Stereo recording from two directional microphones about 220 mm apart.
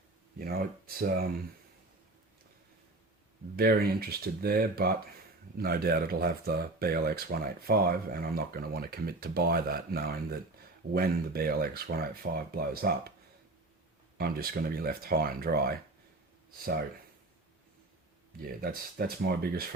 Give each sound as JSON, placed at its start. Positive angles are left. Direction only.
{"t": 0.3, "sound": "speech", "side_deg": -45}
{"t": 3.5, "sound": "speech", "side_deg": -45}
{"t": 14.2, "sound": "speech", "side_deg": -45}
{"t": 18.3, "sound": "speech", "side_deg": -40}